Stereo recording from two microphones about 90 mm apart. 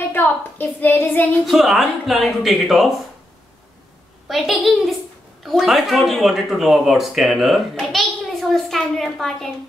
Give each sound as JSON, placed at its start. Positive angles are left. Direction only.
{"t": 0.1, "sound": "a woman's voice", "side_deg": 25}
{"t": 1.4, "sound": "speech", "side_deg": 0}
{"t": 4.3, "sound": "speech", "side_deg": 0}